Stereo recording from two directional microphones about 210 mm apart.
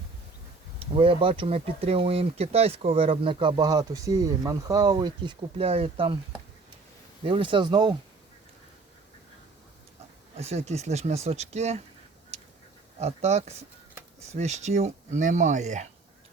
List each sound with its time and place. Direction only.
0.8 s speech: 25° right (ahead or behind)
7.3 s speech: 25° right (ahead or behind)
10.3 s speech: 30° right (ahead or behind)
13.0 s speech: 30° right (ahead or behind)